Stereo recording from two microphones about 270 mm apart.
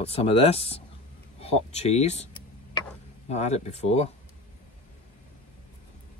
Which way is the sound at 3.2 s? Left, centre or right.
Left.